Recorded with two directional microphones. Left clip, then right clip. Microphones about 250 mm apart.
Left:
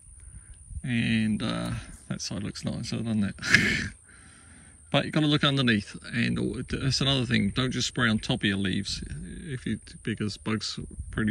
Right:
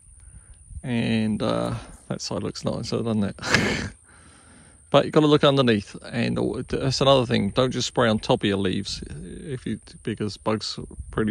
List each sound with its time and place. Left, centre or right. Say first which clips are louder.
0.8 s speech: right 2 dB; centre
4.9 s speech: right 8 dB; right